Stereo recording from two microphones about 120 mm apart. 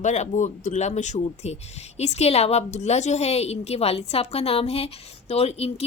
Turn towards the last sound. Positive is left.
turn(degrees=60)  # may be behind; listen again after turning